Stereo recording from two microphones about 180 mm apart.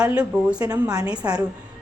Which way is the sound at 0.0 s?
5° right (ahead or behind).